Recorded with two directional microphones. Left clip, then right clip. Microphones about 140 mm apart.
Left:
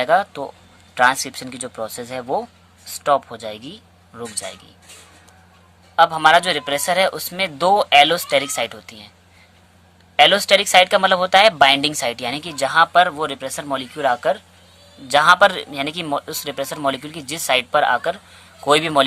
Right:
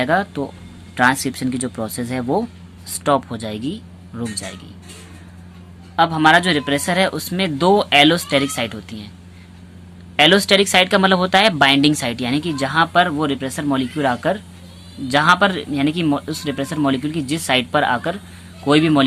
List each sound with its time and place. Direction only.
0.0 s a woman's voice: 35° left (ahead or behind)
6.0 s speech: 40° left (ahead or behind)
10.2 s a woman's voice: 25° left (ahead or behind)
18.6 s speech: 45° left (ahead or behind)